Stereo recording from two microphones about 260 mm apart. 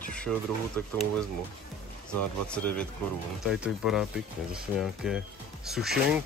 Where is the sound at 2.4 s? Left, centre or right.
Centre.